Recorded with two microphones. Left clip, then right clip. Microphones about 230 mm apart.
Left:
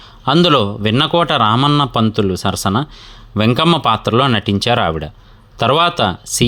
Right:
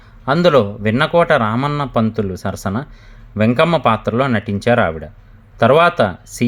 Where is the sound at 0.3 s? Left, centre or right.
Left.